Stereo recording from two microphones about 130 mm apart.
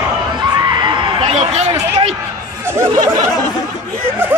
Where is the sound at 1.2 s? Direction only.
55° right (ahead or behind).